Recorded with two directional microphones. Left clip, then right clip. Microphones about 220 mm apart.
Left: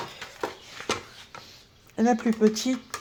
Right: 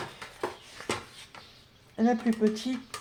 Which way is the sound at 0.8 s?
25° left (ahead or behind).